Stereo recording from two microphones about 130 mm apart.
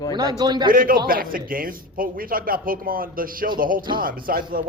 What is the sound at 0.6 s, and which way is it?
Speech, 90° right.